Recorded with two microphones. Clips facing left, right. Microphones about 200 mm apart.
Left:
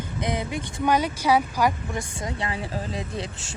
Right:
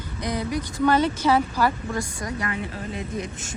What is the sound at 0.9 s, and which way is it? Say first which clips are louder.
Speech: left 1 dB; 10° left (ahead or behind).